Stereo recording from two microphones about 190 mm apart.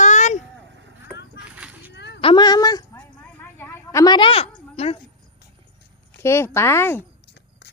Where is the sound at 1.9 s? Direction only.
65° left (ahead or behind).